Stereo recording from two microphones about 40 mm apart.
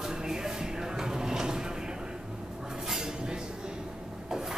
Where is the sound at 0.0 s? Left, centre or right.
Centre.